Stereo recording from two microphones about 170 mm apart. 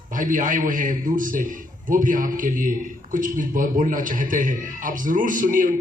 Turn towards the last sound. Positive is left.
turn(degrees=-50)  # may be behind; listen again after turning